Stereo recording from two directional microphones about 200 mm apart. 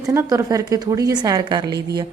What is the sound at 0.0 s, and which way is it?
A woman's voice, 15° right (ahead or behind).